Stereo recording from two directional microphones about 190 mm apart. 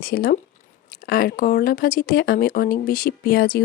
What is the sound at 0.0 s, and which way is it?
Speech, 50° left (ahead or behind).